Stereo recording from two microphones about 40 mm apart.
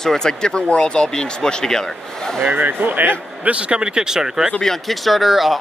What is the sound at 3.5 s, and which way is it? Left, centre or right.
Speech, right.